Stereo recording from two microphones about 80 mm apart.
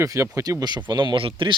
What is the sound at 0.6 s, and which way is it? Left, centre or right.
Speech, right.